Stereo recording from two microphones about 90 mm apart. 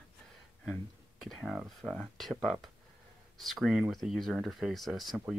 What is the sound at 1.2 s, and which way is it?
Speech, centre (ahead or behind).